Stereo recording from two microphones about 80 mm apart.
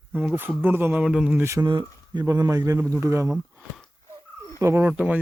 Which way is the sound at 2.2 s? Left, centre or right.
Right.